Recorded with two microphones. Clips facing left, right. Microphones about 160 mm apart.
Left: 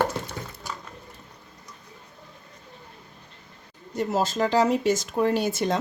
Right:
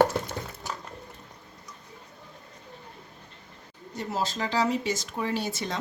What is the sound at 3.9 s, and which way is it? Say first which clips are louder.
Speech: left 6 dB; 50° left (ahead or behind).